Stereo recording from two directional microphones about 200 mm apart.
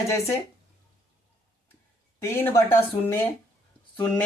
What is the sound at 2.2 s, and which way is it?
Speech, 10° left (ahead or behind).